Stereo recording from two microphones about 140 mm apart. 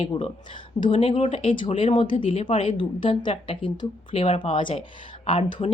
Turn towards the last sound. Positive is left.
turn(degrees=45)  # may be behind; listen again after turning